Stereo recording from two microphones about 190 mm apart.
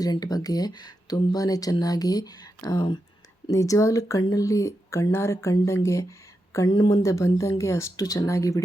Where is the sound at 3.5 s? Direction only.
15° left (ahead or behind).